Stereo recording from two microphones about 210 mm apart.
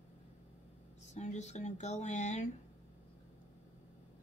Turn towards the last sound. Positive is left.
turn(degrees=35)  # may be behind; listen again after turning